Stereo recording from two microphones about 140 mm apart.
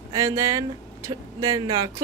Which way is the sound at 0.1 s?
25° right (ahead or behind).